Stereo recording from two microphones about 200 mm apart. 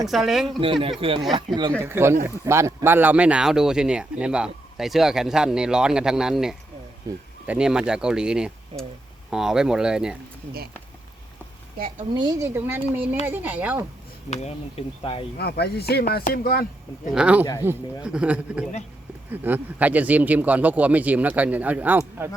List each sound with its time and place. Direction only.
0.1 s speech: centre (ahead or behind)
0.6 s a woman's voice: 25° right (ahead or behind)
1.8 s speech: 10° right (ahead or behind)
7.1 s a woman's voice: 20° right (ahead or behind)
7.4 s speech: 5° right (ahead or behind)
12.1 s a woman's voice: 20° right (ahead or behind)
12.5 s speech: 10° right (ahead or behind)
14.3 s speech: 35° left (ahead or behind)
15.4 s speech: 55° left (ahead or behind)
17.2 s speech: 5° right (ahead or behind)